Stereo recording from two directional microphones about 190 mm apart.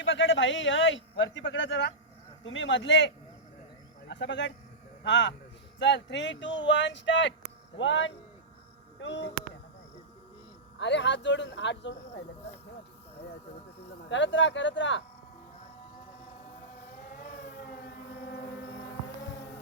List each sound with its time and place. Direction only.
0.0 s speech: 75° left (ahead or behind)
4.1 s speech: 70° left (ahead or behind)
10.8 s speech: 70° left (ahead or behind)
14.1 s speech: 75° left (ahead or behind)
17.1 s civil defense siren: 45° left (ahead or behind); by 18.9 s 70° left (ahead or behind)